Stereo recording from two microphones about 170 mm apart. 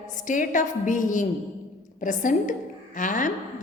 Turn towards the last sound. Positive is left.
turn(degrees=50)  # may be behind; listen again after turning